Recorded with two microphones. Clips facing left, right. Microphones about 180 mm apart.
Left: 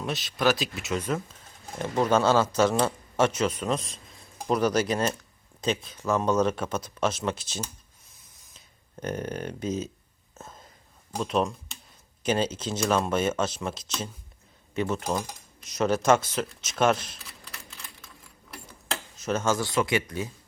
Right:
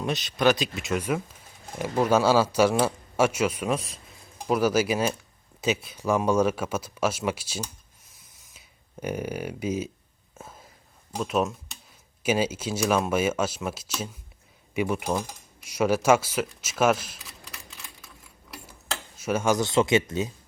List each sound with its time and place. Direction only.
0.0 s speech: centre (ahead or behind)
0.9 s a man's voice: 10° right (ahead or behind)
10.3 s whispering: 10° right (ahead or behind)
11.2 s a man's voice: 5° right (ahead or behind)
19.1 s speech: 10° right (ahead or behind)